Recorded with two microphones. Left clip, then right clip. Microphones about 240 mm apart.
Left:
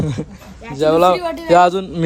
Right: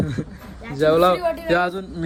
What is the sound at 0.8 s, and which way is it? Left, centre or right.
A man's voice, centre.